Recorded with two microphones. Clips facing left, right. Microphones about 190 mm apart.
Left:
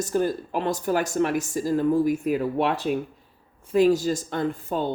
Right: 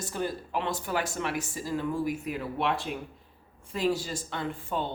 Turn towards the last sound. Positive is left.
turn(degrees=40)  # may be behind; listen again after turning